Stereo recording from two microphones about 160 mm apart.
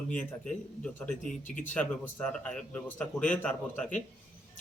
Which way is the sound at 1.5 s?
55° left (ahead or behind).